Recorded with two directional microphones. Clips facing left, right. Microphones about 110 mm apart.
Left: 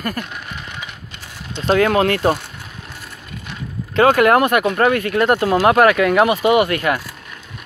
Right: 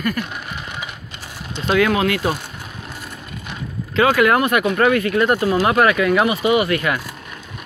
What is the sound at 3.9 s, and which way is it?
Speech, 45° left (ahead or behind).